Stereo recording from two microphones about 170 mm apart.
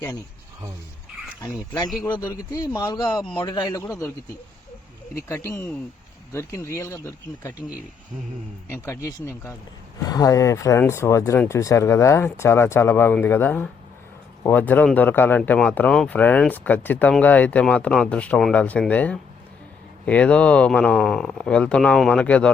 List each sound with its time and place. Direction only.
2.0 s speech: 10° left (ahead or behind)
2.5 s speech: 20° left (ahead or behind)
5.1 s speech: 15° left (ahead or behind)
8.6 s speech: 15° left (ahead or behind)